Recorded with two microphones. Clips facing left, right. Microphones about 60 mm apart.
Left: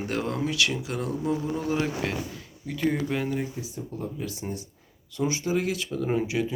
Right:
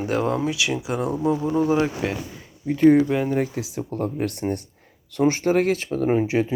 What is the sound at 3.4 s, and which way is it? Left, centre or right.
Speech, right.